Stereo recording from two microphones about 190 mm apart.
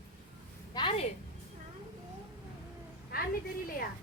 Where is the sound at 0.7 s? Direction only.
25° left (ahead or behind).